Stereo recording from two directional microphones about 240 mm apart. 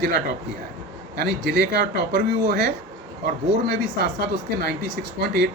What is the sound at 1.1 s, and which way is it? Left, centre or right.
Speech, right.